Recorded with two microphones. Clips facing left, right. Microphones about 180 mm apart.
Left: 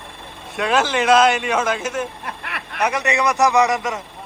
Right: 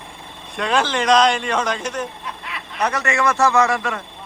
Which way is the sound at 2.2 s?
65° left (ahead or behind).